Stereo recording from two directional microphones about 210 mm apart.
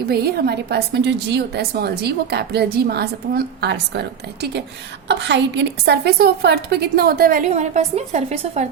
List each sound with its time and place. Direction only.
0.1 s a woman's voice: 50° right (ahead or behind); by 8.6 s 30° right (ahead or behind)